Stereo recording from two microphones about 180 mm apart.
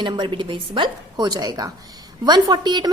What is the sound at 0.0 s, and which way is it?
A woman's voice, 25° right (ahead or behind).